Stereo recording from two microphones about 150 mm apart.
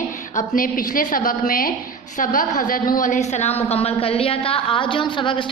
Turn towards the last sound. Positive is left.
turn(degrees=35)  # may be behind; listen again after turning